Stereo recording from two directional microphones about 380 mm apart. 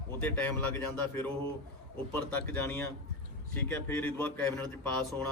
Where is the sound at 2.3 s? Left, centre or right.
Centre.